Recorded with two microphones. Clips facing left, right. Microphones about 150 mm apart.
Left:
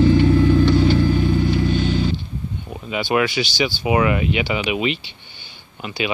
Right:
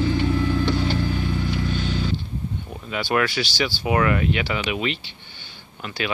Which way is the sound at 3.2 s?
Centre (ahead or behind).